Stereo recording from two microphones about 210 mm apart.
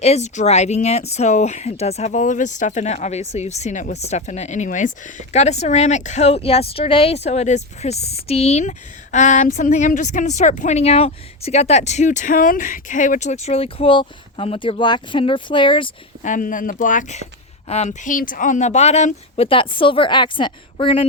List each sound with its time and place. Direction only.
0.0 s a woman's voice: 30° left (ahead or behind)
16.2 s a woman's voice: 40° left (ahead or behind)